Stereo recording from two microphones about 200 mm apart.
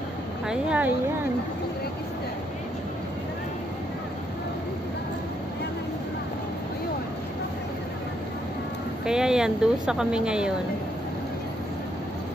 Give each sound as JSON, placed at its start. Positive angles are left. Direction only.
{"t": 0.5, "sound": "speech", "side_deg": -5}
{"t": 9.0, "sound": "speech", "side_deg": -5}